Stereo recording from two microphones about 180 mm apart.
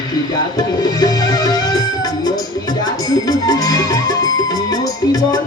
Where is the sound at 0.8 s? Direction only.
20° left (ahead or behind).